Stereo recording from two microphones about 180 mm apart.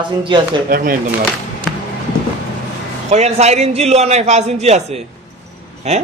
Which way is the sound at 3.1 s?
35° right (ahead or behind).